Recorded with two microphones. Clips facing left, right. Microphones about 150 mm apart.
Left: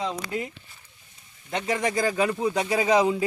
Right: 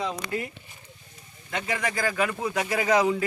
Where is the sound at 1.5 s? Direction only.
25° left (ahead or behind).